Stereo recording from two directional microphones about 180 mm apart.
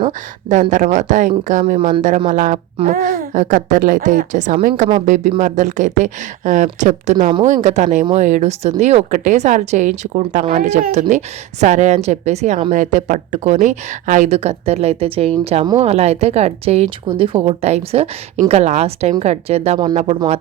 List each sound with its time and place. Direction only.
0.0 s speech: 40° right (ahead or behind)